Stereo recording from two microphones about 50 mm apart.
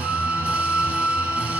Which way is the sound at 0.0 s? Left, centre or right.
Right.